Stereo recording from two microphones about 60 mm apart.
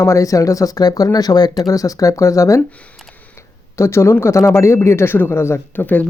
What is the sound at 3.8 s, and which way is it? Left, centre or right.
Speech, left.